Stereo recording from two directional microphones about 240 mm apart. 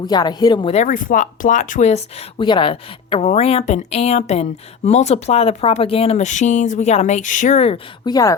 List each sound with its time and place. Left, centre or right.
0.0 s speech: centre